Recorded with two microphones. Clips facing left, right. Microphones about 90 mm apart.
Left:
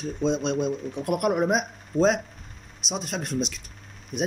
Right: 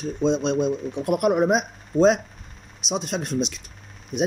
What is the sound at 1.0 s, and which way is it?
Speech, 5° right (ahead or behind).